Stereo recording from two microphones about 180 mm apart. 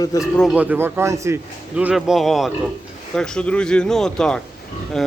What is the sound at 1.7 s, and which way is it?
Speech, 5° right (ahead or behind).